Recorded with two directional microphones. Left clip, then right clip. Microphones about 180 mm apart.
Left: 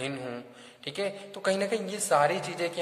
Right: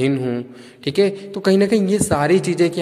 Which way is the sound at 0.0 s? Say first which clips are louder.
Right 14 dB; 25° right (ahead or behind).